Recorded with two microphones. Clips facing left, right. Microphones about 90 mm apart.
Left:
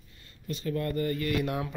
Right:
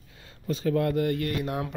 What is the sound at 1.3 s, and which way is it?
Speech, 30° right (ahead or behind).